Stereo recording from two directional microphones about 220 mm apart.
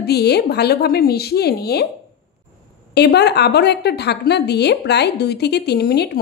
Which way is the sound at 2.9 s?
50° left (ahead or behind).